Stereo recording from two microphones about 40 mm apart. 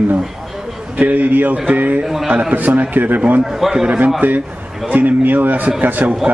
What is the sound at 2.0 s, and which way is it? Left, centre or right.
Speech, centre.